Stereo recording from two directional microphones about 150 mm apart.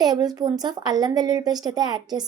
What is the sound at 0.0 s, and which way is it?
A woman's voice, 25° right (ahead or behind).